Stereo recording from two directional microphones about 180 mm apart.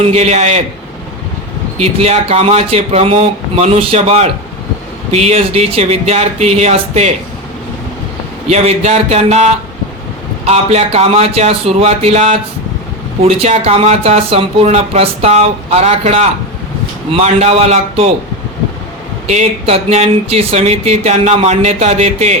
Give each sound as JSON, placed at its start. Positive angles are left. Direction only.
{"t": 0.0, "sound": "speech", "side_deg": -35}
{"t": 1.8, "sound": "speech", "side_deg": -35}
{"t": 8.4, "sound": "speech", "side_deg": -35}
{"t": 19.3, "sound": "speech", "side_deg": -35}